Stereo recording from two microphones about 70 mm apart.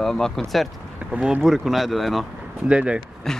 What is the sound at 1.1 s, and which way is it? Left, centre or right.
Speech, centre.